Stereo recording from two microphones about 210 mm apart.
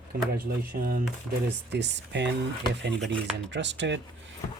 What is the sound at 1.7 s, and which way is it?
Speech, 55° right (ahead or behind).